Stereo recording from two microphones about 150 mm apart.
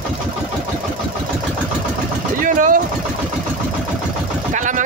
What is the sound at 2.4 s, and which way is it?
Vehicle, 60° right (ahead or behind).